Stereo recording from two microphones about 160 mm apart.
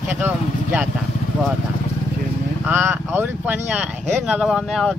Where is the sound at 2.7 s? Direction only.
15° right (ahead or behind).